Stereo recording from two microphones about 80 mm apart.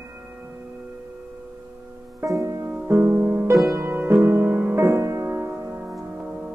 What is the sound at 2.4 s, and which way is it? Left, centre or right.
Music, right.